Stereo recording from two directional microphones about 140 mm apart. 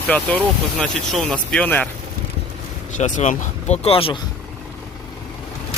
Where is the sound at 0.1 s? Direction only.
10° left (ahead or behind).